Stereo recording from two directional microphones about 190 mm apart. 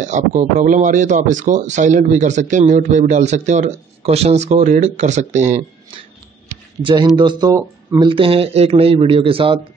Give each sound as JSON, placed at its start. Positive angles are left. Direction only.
{"t": 0.1, "sound": "speech", "side_deg": -40}
{"t": 6.8, "sound": "speech", "side_deg": -25}
{"t": 8.1, "sound": "speech", "side_deg": -30}